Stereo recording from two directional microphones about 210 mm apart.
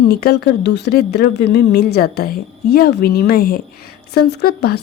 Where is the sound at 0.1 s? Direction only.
50° left (ahead or behind).